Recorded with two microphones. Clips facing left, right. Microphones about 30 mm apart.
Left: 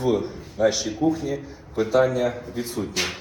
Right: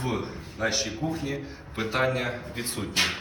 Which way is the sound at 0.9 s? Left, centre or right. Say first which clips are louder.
Left 7 dB; right.